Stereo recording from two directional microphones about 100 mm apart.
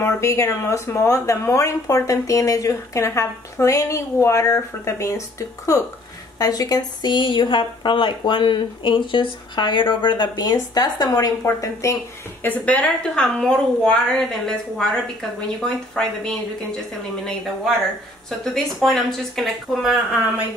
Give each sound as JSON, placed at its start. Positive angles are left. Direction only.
{"t": 0.0, "sound": "speech", "side_deg": 30}
{"t": 6.3, "sound": "a woman's voice", "side_deg": 40}
{"t": 11.4, "sound": "speech", "side_deg": 30}
{"t": 12.4, "sound": "a woman's voice", "side_deg": 10}
{"t": 18.4, "sound": "speech", "side_deg": 5}